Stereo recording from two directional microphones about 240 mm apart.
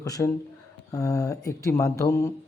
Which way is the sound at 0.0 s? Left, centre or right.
Centre.